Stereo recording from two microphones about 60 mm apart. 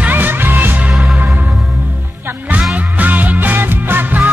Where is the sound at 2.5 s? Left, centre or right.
Right.